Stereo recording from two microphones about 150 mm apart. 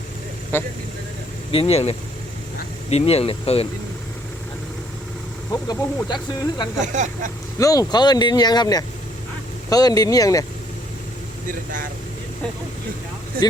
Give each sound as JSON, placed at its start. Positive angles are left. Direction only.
{"t": 0.5, "sound": "speech", "side_deg": 15}
{"t": 1.5, "sound": "speech", "side_deg": 40}
{"t": 5.6, "sound": "speech", "side_deg": 30}
{"t": 6.7, "sound": "speech", "side_deg": -55}
{"t": 7.6, "sound": "speech", "side_deg": 25}